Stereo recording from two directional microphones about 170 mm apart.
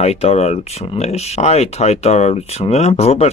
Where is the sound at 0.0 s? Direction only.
40° left (ahead or behind).